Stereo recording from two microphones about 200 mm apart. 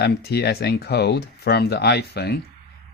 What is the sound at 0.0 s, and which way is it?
Speech, 50° left (ahead or behind).